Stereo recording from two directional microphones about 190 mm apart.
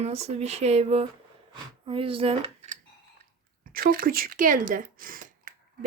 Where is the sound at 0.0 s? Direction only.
35° right (ahead or behind).